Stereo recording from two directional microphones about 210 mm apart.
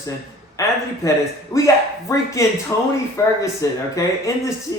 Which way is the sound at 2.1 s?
15° left (ahead or behind).